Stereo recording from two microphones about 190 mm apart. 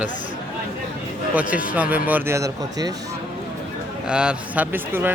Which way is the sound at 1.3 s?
10° right (ahead or behind).